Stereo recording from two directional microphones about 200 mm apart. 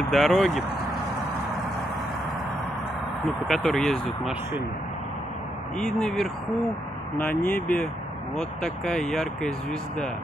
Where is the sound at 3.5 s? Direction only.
Centre (ahead or behind).